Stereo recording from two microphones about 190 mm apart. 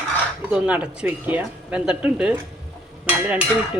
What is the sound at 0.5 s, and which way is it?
Dishes, 5° right (ahead or behind).